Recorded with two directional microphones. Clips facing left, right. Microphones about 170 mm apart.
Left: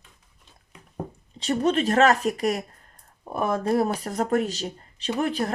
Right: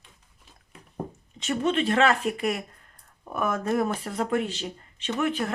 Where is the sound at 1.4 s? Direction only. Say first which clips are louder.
Left 2 dB; 35° left (ahead or behind).